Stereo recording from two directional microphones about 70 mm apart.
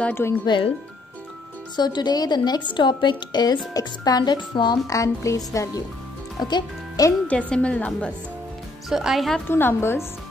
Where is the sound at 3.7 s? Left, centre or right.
Left.